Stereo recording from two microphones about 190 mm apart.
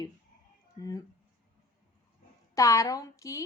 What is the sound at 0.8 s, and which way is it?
Speech, 20° left (ahead or behind).